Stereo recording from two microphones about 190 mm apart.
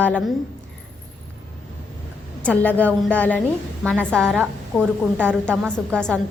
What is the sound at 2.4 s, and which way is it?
A woman's voice, 5° left (ahead or behind).